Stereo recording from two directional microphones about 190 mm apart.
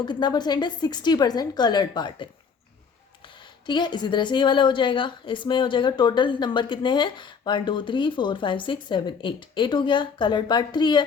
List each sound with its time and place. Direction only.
0.0 s a woman's voice: 25° left (ahead or behind)
3.4 s a woman's voice: 25° left (ahead or behind)